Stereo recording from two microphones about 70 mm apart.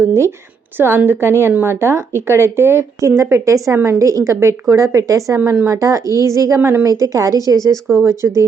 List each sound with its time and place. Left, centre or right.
0.0 s a woman's voice: right
5.4 s speech: right
5.6 s a woman's voice: right
6.6 s speech: right
7.0 s a woman's voice: right